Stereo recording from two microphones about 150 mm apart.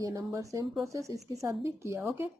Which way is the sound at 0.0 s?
20° right (ahead or behind).